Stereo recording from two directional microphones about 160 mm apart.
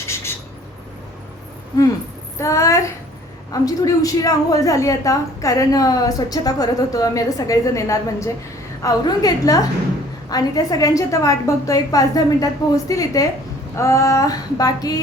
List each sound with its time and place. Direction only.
2.4 s a woman's voice: 20° left (ahead or behind)